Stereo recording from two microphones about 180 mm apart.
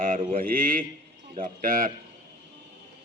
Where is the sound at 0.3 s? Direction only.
50° right (ahead or behind).